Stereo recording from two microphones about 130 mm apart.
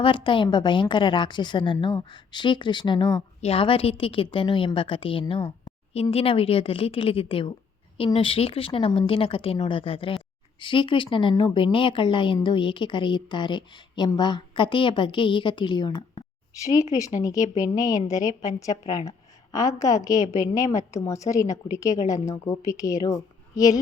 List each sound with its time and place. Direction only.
0.0 s a woman's voice: 40° left (ahead or behind)